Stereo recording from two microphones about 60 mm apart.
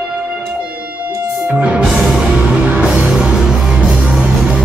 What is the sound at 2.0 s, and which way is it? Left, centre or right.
Music, centre.